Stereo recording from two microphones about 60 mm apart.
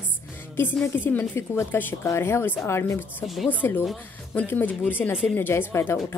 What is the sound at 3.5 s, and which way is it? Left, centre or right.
A woman's voice, left.